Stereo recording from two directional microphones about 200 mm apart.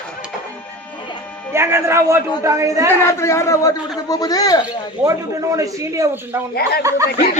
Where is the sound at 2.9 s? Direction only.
15° left (ahead or behind).